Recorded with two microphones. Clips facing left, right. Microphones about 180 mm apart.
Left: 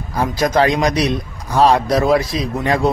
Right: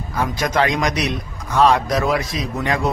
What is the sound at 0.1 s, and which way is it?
A man's voice, 35° left (ahead or behind).